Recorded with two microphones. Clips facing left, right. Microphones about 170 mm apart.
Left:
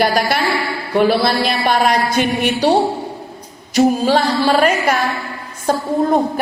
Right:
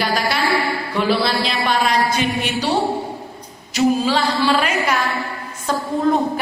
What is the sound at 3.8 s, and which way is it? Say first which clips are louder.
A woman's voice: left 4 dB; 50° left (ahead or behind).